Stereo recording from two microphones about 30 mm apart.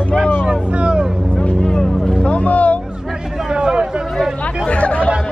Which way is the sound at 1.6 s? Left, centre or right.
Left.